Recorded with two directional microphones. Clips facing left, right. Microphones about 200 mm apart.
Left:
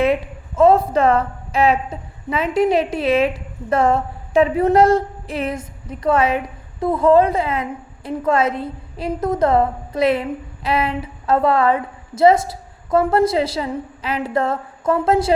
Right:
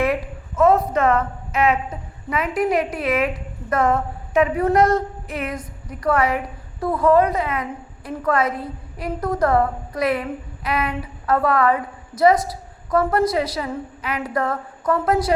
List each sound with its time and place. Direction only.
0.0 s a woman's voice: 25° left (ahead or behind)